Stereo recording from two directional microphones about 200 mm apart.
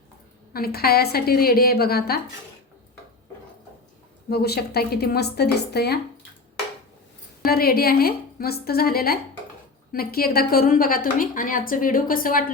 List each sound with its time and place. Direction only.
0.5 s a woman's voice: 50° left (ahead or behind)
4.3 s a woman's voice: 50° left (ahead or behind)
7.4 s a woman's voice: 50° left (ahead or behind)